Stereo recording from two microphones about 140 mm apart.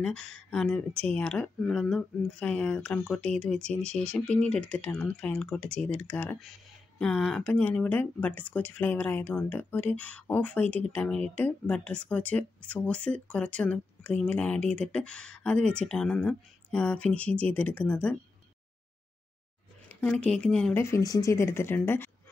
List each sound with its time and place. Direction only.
0.0 s speech: 5° left (ahead or behind)
20.0 s speech: 10° left (ahead or behind)
20.7 s speech: 20° left (ahead or behind)